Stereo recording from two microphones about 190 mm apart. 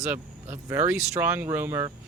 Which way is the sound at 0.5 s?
10° right (ahead or behind).